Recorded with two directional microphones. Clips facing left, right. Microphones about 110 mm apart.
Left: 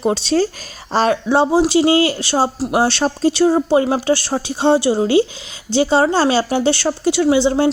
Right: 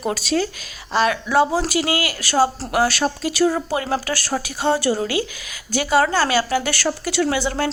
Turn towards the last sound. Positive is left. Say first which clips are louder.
# left 7 dB
turn(degrees=20)  # may be behind; listen again after turning